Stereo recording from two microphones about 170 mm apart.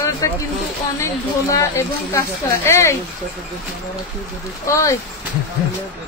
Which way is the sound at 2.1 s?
15° left (ahead or behind).